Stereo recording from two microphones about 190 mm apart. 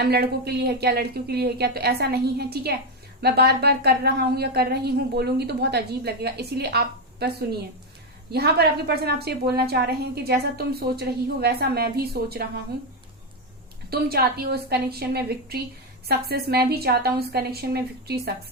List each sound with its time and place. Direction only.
0.0 s a woman's voice: 55° right (ahead or behind)
8.3 s a woman's voice: 55° right (ahead or behind)
13.9 s a woman's voice: 55° right (ahead or behind)